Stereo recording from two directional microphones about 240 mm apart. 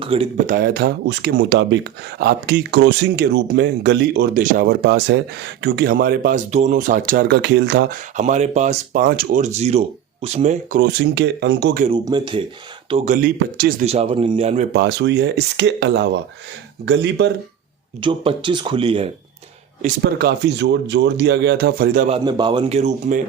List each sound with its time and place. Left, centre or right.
0.0 s speech: right
0.5 s speech: right
8.1 s speech: right
11.0 s speech: right
11.9 s speech: centre
12.9 s speech: right
14.7 s speech: right
18.0 s speech: right
19.8 s speech: right
22.2 s speech: centre